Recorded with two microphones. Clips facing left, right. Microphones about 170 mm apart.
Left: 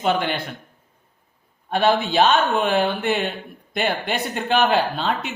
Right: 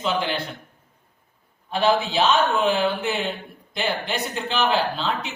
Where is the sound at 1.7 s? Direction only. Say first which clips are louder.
Left 2 dB; 60° left (ahead or behind).